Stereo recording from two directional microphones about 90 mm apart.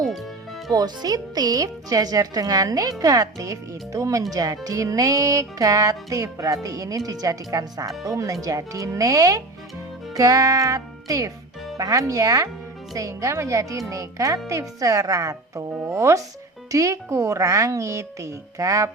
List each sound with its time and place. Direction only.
0.7 s speech: 45° right (ahead or behind)
3.0 s music: 45° right (ahead or behind)